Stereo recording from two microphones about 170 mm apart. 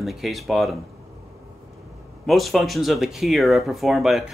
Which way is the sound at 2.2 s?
Centre (ahead or behind).